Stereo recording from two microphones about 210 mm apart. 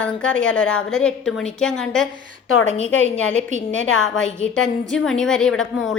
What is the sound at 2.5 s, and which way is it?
A woman's voice, 65° left (ahead or behind).